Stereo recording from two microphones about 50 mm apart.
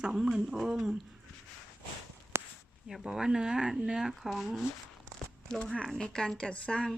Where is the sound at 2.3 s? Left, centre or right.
Right.